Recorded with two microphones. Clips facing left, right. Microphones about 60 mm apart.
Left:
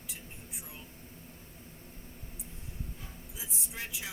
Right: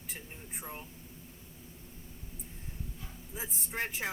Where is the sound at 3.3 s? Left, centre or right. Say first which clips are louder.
Right 7 dB; right.